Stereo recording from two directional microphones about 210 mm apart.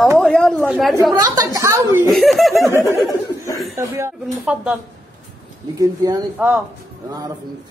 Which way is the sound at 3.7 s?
15° right (ahead or behind).